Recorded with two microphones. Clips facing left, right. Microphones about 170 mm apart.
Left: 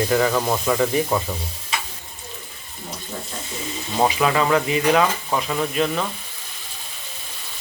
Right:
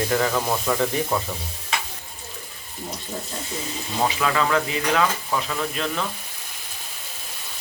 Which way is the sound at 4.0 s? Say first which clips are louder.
Left 4 dB; 20° left (ahead or behind).